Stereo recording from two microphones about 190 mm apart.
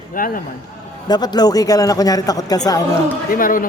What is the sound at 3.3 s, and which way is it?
Speech, 45° left (ahead or behind).